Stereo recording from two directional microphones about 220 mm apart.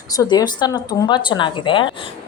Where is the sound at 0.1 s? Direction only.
15° left (ahead or behind).